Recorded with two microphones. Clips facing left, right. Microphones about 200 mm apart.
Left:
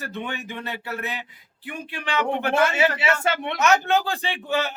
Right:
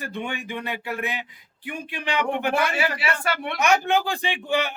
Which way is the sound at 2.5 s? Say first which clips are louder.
Left 3 dB; 25° left (ahead or behind).